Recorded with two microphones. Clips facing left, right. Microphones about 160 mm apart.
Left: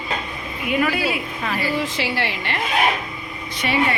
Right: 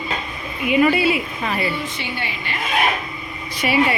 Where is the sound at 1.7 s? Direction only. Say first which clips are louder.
Left 4 dB; 90° left.